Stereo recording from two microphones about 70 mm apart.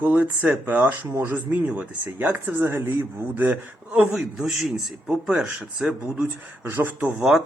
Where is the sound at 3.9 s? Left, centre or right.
Centre.